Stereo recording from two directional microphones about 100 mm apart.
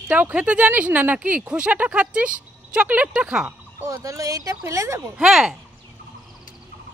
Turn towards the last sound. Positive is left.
turn(degrees=-5)  # may be behind; listen again after turning